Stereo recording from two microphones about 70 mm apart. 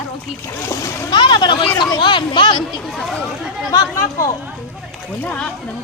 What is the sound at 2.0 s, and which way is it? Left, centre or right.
Speech, left.